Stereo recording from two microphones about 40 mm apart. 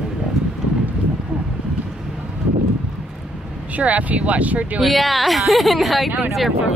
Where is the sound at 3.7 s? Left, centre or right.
Right.